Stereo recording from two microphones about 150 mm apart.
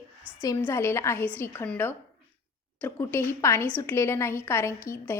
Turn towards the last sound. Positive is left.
turn(degrees=20)  # may be behind; listen again after turning